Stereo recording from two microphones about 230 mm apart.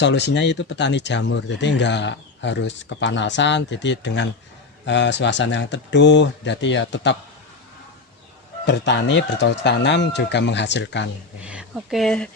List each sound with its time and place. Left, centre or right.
0.0 s speech: left
8.6 s speech: left
11.4 s speech: centre